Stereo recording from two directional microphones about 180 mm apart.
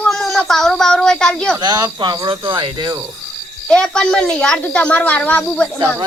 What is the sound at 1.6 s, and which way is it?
Speech, 20° right (ahead or behind).